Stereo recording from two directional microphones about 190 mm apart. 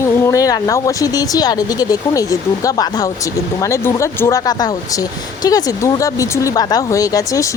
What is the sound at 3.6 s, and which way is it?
Speech, 15° left (ahead or behind).